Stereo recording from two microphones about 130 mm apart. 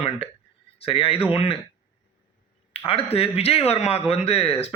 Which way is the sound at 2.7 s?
45° left (ahead or behind).